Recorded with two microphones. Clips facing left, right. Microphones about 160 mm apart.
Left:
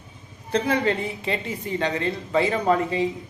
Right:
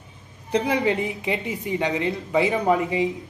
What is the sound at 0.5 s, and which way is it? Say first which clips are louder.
A woman's voice: right 1 dB; 15° right (ahead or behind).